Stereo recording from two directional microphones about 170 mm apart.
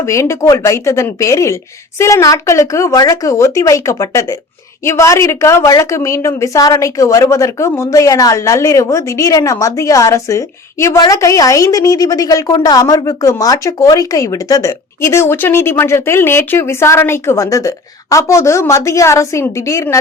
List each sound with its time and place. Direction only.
0.0 s a woman's voice: 15° left (ahead or behind)